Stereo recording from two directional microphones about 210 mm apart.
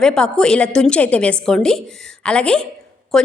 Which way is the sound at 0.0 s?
5° left (ahead or behind).